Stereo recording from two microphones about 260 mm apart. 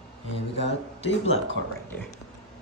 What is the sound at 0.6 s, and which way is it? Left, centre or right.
Speech, left.